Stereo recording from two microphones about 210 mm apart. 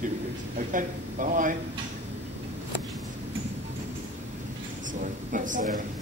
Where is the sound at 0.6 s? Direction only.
40° right (ahead or behind).